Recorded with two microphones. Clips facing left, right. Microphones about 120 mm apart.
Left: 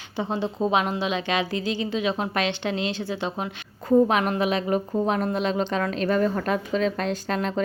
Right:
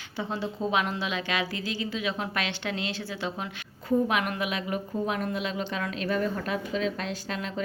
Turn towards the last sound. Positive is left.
turn(degrees=45)  # may be behind; listen again after turning